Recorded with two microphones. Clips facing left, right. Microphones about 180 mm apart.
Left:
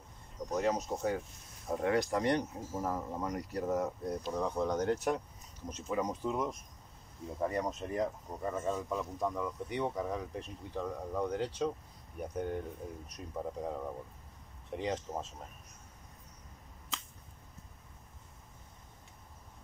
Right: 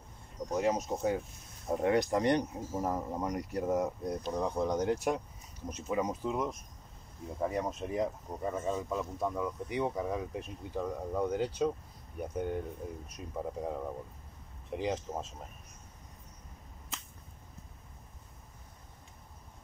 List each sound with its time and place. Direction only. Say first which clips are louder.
0.5 s speech: right 2 dB; 10° right (ahead or behind)